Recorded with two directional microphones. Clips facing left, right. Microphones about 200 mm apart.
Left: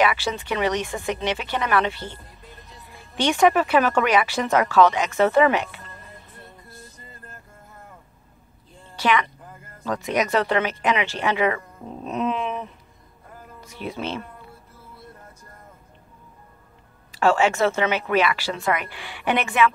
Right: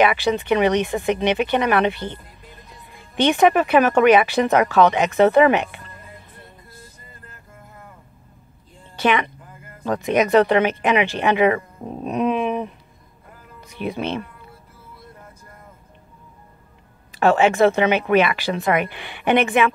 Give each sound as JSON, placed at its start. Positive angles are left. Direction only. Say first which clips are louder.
{"t": 0.0, "sound": "speech", "louder": "right 4 dB", "side_deg": -20}
{"t": 3.2, "sound": "speech", "louder": "right 3 dB", "side_deg": -20}
{"t": 8.9, "sound": "a sound", "louder": "right 2 dB", "side_deg": -20}
{"t": 10.0, "sound": "speech", "louder": "right 7 dB", "side_deg": -20}
{"t": 17.1, "sound": "speech", "louder": "right 3 dB", "side_deg": -20}